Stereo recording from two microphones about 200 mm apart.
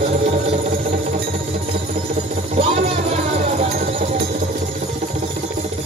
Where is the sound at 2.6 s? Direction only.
30° right (ahead or behind).